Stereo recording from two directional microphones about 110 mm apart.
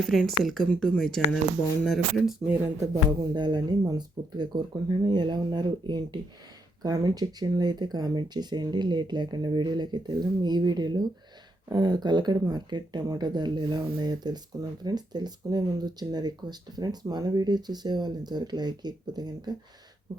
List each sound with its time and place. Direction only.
0.1 s speech: centre (ahead or behind)
2.8 s speech: 35° right (ahead or behind)